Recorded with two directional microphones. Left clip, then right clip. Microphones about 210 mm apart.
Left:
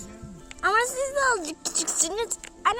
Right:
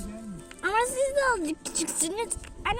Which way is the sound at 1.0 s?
45° left (ahead or behind).